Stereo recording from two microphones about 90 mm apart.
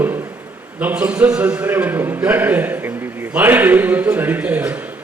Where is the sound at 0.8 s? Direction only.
15° right (ahead or behind).